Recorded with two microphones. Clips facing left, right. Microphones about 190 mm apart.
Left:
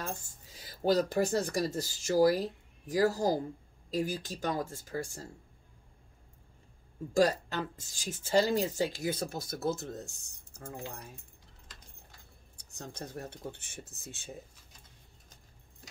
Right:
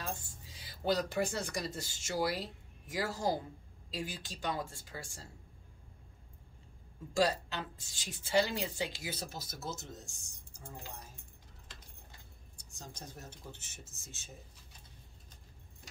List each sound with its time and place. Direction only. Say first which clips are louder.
0.6 s speech: left 5 dB; 45° left (ahead or behind)
7.2 s a woman's voice: left 4 dB; 50° left (ahead or behind); by 11.1 s 65° left (ahead or behind)
12.5 s speech: left 7 dB; 65° left (ahead or behind)